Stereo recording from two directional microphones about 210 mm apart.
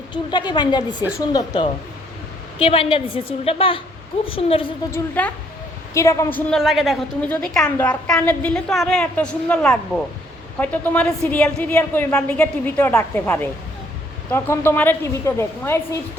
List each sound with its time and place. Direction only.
0.1 s a woman's voice: 20° left (ahead or behind)
4.9 s a woman's voice: 5° left (ahead or behind)